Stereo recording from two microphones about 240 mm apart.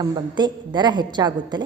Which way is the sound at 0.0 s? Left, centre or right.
Centre.